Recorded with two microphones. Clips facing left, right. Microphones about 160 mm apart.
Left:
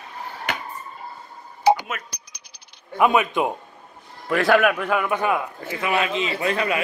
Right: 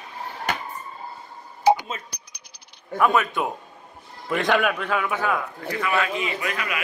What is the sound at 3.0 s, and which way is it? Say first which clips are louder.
Speech: left 2 dB; 15° left (ahead or behind).